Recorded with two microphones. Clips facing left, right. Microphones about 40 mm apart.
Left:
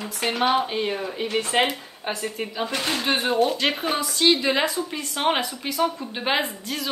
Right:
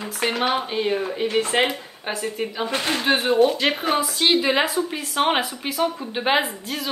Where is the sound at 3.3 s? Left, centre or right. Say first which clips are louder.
Right 4 dB; centre.